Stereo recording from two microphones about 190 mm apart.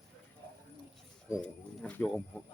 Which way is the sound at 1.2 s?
Centre (ahead or behind).